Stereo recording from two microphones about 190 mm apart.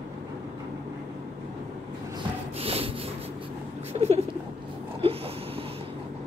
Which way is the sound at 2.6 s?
30° right (ahead or behind).